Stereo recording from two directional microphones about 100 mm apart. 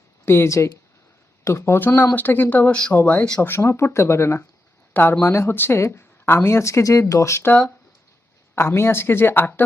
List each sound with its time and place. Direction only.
0.3 s speech: 25° left (ahead or behind)
3.4 s speech: 25° left (ahead or behind)
8.5 s speech: 25° left (ahead or behind)